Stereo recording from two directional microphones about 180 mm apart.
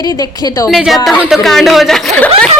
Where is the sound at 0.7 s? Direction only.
Centre (ahead or behind).